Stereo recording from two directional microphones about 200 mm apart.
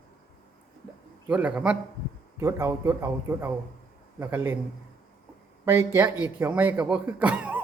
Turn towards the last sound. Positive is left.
turn(degrees=-10)  # may be behind; listen again after turning